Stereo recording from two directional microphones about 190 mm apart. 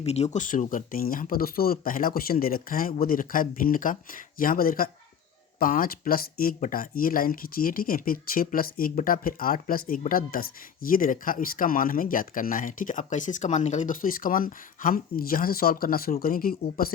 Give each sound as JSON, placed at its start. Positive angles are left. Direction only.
{"t": 0.0, "sound": "speech", "side_deg": 35}